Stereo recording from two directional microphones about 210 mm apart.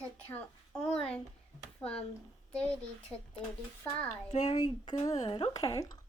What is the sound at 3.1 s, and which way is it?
Speech, 5° left (ahead or behind).